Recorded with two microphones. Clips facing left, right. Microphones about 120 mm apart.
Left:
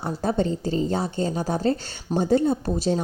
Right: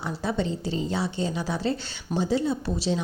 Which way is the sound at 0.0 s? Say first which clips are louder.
Left 4 dB; 45° left (ahead or behind).